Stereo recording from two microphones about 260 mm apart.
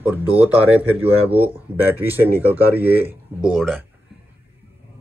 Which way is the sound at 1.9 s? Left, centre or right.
Centre.